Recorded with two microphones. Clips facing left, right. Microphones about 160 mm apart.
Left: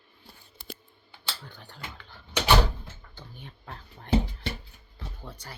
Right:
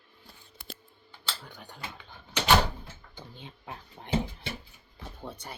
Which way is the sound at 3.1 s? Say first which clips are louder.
Right 3 dB; 20° right (ahead or behind).